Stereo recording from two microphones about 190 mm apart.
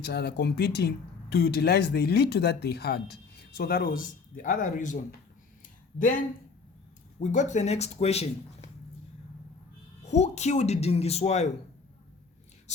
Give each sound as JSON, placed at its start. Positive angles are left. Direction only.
{"t": 0.0, "sound": "speech", "side_deg": 60}
{"t": 6.0, "sound": "speech", "side_deg": 45}
{"t": 10.1, "sound": "speech", "side_deg": 35}